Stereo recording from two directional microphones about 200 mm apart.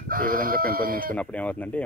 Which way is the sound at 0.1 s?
45° right (ahead or behind).